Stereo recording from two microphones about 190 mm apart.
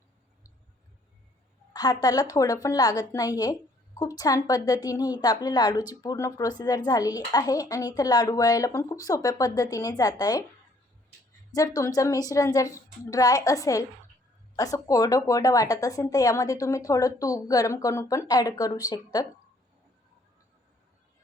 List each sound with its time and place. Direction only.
1.7 s a woman's voice: 20° left (ahead or behind)
11.5 s speech: 20° left (ahead or behind)